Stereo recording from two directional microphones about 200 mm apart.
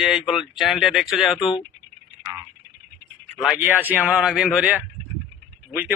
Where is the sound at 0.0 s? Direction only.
Centre (ahead or behind).